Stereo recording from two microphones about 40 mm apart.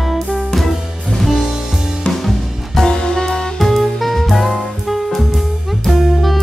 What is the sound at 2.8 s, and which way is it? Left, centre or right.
Music, centre.